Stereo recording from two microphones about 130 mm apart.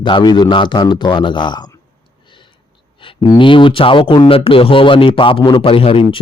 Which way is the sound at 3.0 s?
40° left (ahead or behind).